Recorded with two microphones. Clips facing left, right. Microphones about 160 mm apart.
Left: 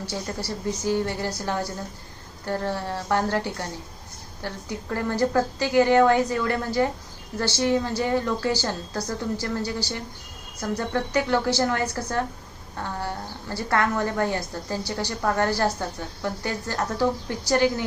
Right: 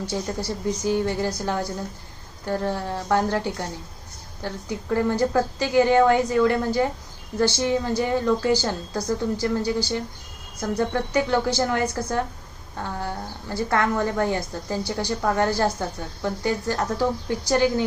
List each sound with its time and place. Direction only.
0.1 s a woman's voice: 15° right (ahead or behind)
13.5 s a woman's voice: 15° right (ahead or behind)